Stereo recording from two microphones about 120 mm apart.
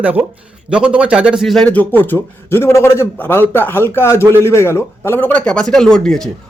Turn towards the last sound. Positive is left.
turn(degrees=5)  # may be behind; listen again after turning